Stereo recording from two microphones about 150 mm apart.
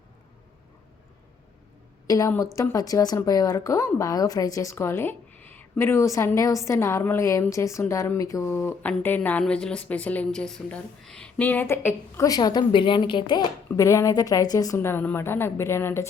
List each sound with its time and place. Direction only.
2.0 s a woman's voice: 20° left (ahead or behind)
13.7 s a woman's voice: 20° left (ahead or behind)